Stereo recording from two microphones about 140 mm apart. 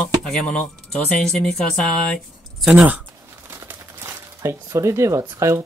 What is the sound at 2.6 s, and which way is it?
Speech, 10° right (ahead or behind).